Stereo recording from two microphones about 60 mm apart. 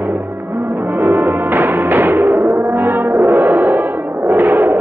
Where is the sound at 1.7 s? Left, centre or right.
Right.